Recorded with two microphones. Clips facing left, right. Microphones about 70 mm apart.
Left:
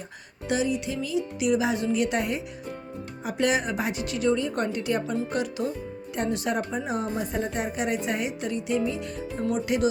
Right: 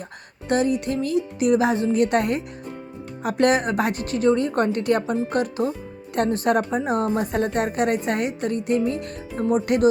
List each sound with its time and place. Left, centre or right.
0.4 s speech: right